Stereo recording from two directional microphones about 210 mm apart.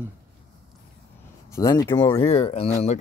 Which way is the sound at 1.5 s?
15° left (ahead or behind).